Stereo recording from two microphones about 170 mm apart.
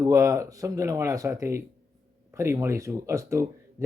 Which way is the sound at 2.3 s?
15° right (ahead or behind).